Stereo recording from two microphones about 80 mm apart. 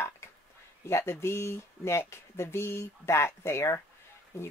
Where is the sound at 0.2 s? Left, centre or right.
Left.